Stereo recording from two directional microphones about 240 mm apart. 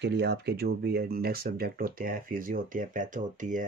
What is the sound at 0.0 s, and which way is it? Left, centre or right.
Speech, right.